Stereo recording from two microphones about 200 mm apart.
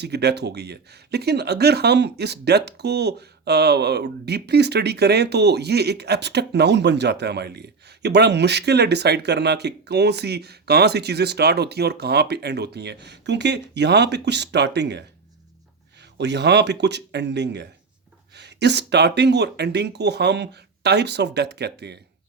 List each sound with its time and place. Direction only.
0.0 s speech: 55° right (ahead or behind)